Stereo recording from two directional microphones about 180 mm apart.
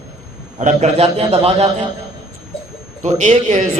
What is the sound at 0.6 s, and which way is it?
Speech, 40° right (ahead or behind).